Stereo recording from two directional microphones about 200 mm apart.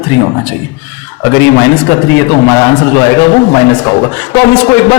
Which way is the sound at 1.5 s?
15° left (ahead or behind).